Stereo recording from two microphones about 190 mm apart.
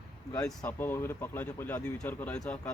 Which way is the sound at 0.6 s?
10° left (ahead or behind).